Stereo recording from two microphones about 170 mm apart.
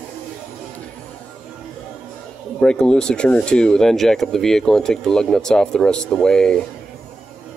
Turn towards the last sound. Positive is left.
turn(degrees=5)  # may be behind; listen again after turning